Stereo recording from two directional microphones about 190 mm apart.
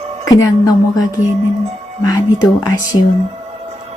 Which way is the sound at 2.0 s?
20° left (ahead or behind).